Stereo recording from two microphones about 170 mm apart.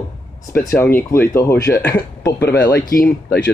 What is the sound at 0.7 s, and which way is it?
Speech, 15° left (ahead or behind).